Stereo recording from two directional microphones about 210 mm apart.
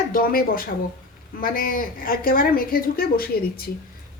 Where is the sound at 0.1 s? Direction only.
45° left (ahead or behind).